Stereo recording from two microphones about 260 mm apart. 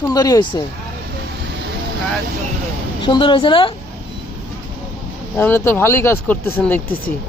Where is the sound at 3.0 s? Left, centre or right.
Centre.